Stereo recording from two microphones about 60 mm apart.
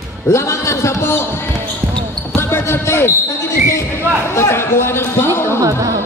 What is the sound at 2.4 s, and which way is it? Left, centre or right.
Basketball bounce, left.